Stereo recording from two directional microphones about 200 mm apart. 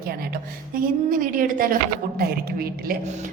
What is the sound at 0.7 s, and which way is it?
A woman's voice, 45° right (ahead or behind).